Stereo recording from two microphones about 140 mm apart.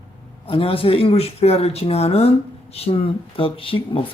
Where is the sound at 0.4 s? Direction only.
40° left (ahead or behind).